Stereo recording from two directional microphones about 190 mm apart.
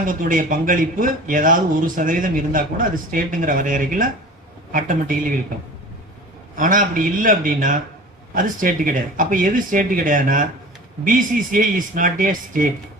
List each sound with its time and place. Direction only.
0.0 s speech: 45° right (ahead or behind)
6.6 s speech: 45° right (ahead or behind)